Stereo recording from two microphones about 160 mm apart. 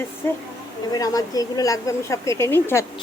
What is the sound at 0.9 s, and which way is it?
Speech, 25° left (ahead or behind).